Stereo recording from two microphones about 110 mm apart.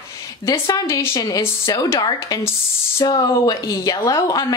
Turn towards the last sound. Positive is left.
turn(degrees=30)  # may be behind; listen again after turning